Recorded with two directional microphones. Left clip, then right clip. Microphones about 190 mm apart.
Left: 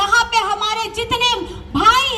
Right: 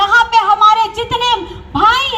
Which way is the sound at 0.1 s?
45° left (ahead or behind).